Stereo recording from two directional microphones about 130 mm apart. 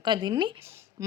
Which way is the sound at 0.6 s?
20° right (ahead or behind).